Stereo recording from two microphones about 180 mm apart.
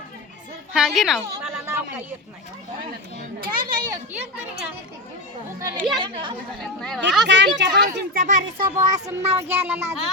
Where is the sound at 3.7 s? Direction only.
25° right (ahead or behind).